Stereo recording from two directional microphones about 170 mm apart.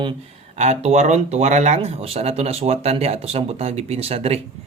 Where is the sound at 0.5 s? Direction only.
40° right (ahead or behind).